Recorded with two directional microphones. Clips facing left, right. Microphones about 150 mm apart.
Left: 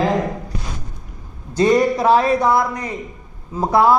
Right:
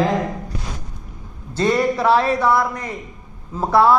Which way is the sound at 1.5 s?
15° left (ahead or behind).